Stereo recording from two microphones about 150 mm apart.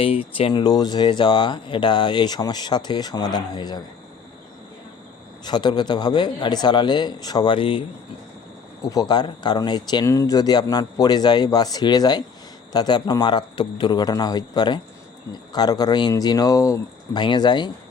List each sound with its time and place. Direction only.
0.0 s speech: 40° left (ahead or behind)
5.5 s speech: 30° left (ahead or behind)